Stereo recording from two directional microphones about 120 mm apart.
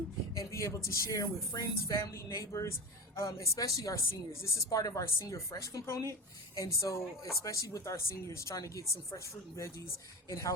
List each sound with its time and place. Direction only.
0.3 s speech: 25° left (ahead or behind)